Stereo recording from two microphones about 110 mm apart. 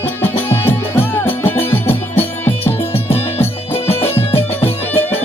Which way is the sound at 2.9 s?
65° left (ahead or behind).